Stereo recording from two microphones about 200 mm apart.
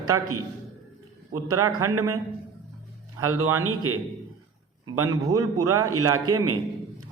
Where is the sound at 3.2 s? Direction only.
90° right.